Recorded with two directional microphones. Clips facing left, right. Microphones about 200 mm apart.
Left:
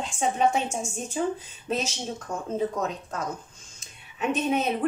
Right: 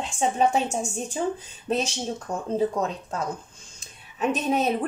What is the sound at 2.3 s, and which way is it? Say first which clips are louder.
Speech: right 3 dB; 35° right (ahead or behind).